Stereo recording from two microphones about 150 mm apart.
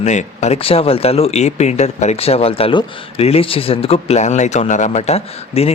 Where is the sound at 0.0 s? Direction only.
50° left (ahead or behind).